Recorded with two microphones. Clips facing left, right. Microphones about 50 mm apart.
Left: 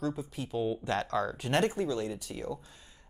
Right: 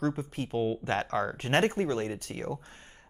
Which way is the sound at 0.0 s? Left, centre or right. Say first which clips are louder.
Right 3 dB; right.